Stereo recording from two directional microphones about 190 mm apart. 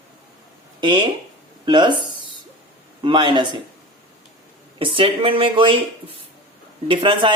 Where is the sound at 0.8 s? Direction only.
25° right (ahead or behind).